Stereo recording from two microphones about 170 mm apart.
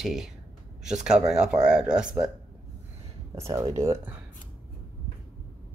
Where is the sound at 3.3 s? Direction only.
15° right (ahead or behind).